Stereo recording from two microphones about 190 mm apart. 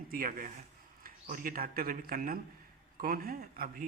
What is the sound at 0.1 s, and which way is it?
A man's voice, 45° right (ahead or behind).